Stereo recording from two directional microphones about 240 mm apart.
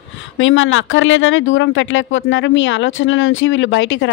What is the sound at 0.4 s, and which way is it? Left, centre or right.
Speech, left.